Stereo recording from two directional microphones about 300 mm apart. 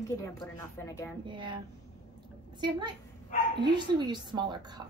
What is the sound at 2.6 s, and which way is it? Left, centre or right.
A woman's voice, centre.